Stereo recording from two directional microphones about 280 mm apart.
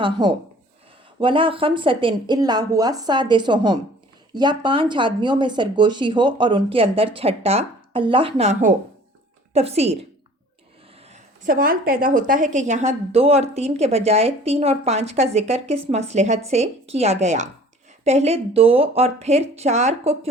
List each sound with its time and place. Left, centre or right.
0.0 s a woman's voice: centre
11.1 s a woman's voice: right